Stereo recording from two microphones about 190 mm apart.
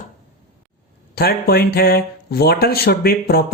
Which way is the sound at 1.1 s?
55° left (ahead or behind).